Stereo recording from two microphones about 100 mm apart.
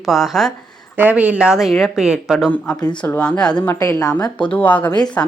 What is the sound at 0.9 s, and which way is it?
Speech, 15° right (ahead or behind).